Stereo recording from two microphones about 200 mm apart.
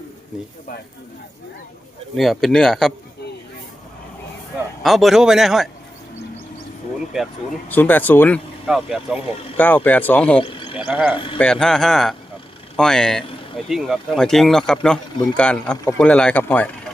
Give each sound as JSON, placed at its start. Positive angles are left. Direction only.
{"t": 2.1, "sound": "speech", "side_deg": 0}
{"t": 4.8, "sound": "speech", "side_deg": 0}
{"t": 7.1, "sound": "speech", "side_deg": 0}
{"t": 8.6, "sound": "speech", "side_deg": 0}
{"t": 9.6, "sound": "speech", "side_deg": 10}
{"t": 10.4, "sound": "speech", "side_deg": 25}
{"t": 10.8, "sound": "speech", "side_deg": -5}
{"t": 11.1, "sound": "speech", "side_deg": 25}
{"t": 11.3, "sound": "speech", "side_deg": 5}